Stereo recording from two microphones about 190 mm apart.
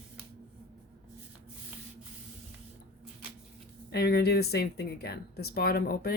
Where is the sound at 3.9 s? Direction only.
55° left (ahead or behind).